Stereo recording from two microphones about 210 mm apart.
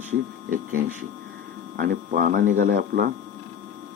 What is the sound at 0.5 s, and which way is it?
Speech, 40° right (ahead or behind).